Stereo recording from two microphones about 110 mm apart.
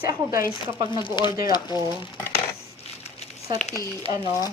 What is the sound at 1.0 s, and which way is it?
Speech, 45° left (ahead or behind).